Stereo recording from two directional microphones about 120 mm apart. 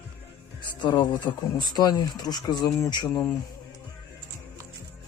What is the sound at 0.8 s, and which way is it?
Speech, 40° left (ahead or behind).